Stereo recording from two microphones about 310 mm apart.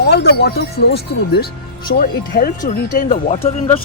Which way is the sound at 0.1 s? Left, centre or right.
Left.